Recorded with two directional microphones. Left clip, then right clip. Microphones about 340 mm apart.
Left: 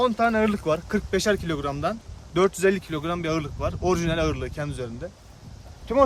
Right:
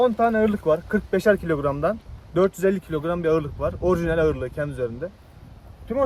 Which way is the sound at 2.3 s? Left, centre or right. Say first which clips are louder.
Even; centre.